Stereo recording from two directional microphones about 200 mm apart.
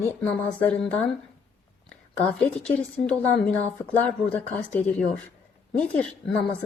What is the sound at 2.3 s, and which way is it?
A woman's voice, 5° left (ahead or behind).